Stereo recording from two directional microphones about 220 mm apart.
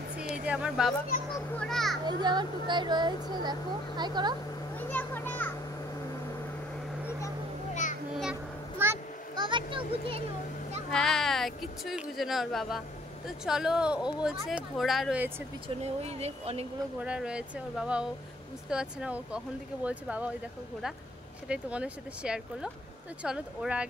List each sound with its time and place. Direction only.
0.2 s a child's voice: 5° right (ahead or behind)
2.0 s speech: 20° right (ahead or behind)
4.7 s children playing: 10° left (ahead or behind)
8.2 s a sound: 5° right (ahead or behind); by 10.2 s 25° right (ahead or behind)
10.9 s speech: centre (ahead or behind)
15.8 s speech: 30° right (ahead or behind)
17.0 s speech: 5° right (ahead or behind)
21.5 s speech: 5° right (ahead or behind)